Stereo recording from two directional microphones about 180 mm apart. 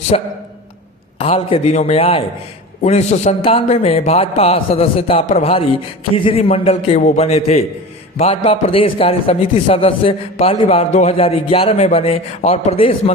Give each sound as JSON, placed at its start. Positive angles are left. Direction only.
{"t": 0.1, "sound": "a man's voice", "side_deg": 35}